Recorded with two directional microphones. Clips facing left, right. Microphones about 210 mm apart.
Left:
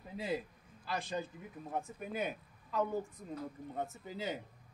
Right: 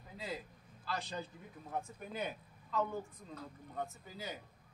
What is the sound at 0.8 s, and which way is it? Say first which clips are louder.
Speech: left 3 dB; 15° left (ahead or behind).